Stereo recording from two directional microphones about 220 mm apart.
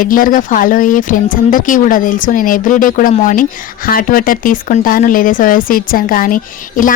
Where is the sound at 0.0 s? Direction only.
40° left (ahead or behind).